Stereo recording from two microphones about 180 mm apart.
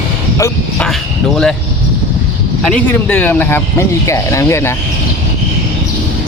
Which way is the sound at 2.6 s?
10° left (ahead or behind).